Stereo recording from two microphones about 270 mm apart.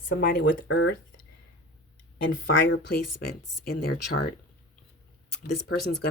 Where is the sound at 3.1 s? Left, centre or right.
Left.